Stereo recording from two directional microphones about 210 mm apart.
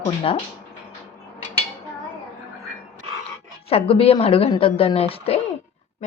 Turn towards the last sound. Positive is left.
turn(degrees=35)  # may be behind; listen again after turning